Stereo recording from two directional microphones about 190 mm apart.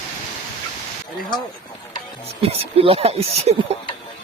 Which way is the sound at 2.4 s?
30° right (ahead or behind).